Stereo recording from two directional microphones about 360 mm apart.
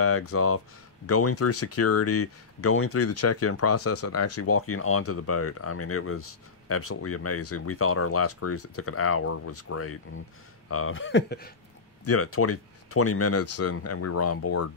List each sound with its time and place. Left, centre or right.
0.0 s speech: left
12.0 s speech: left